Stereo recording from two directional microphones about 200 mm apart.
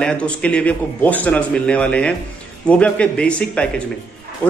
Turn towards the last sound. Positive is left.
turn(degrees=5)  # may be behind; listen again after turning